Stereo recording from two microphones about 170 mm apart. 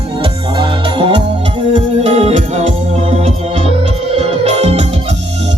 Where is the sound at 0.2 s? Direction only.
30° right (ahead or behind).